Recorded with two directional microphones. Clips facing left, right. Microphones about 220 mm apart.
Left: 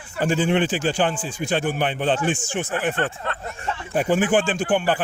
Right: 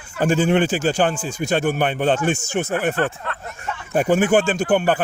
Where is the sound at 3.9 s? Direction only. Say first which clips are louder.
Right 3 dB; 50° right (ahead or behind).